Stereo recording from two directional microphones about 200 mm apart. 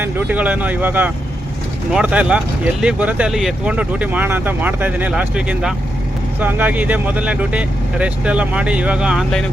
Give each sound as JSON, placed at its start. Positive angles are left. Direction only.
{"t": 0.0, "sound": "speech", "side_deg": -10}